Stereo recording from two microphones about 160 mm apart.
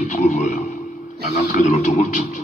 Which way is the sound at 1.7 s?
55° left (ahead or behind).